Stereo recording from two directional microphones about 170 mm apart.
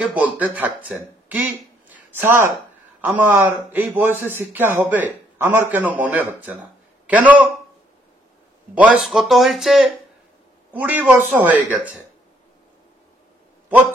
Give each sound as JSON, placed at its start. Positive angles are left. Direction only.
{"t": 0.0, "sound": "a man's voice", "side_deg": -10}
{"t": 8.7, "sound": "a man's voice", "side_deg": -5}